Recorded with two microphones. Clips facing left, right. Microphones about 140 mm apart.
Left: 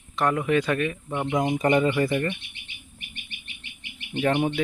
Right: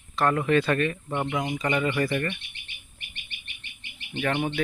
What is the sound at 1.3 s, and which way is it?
Speech, 30° left (ahead or behind).